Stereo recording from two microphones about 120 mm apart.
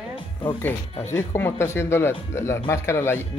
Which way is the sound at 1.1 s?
20° left (ahead or behind).